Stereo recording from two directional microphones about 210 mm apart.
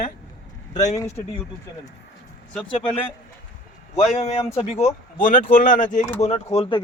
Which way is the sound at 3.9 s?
35° left (ahead or behind).